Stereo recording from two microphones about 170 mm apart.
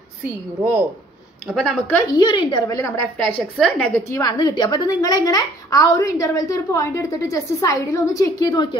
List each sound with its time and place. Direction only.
0.6 s speech: 10° right (ahead or behind)
1.5 s speech: centre (ahead or behind)
2.1 s a woman's voice: 25° left (ahead or behind)
2.8 s a woman's voice: 10° left (ahead or behind)
4.2 s a woman's voice: 25° left (ahead or behind)